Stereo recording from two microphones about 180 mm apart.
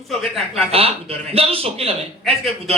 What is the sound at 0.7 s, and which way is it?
A man's voice, 35° right (ahead or behind).